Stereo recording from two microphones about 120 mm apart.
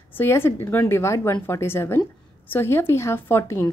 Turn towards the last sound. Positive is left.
turn(degrees=20)  # may be behind; listen again after turning